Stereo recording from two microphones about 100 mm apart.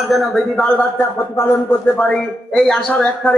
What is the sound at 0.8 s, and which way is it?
Speech, 25° left (ahead or behind).